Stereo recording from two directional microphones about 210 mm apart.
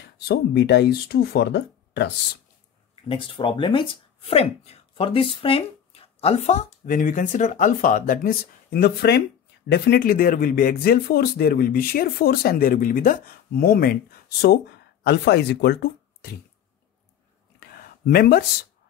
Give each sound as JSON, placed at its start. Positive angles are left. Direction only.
{"t": 0.0, "sound": "speech", "side_deg": 55}
{"t": 3.1, "sound": "speech", "side_deg": 25}
{"t": 15.0, "sound": "speech", "side_deg": 55}
{"t": 17.6, "sound": "a sound", "side_deg": 45}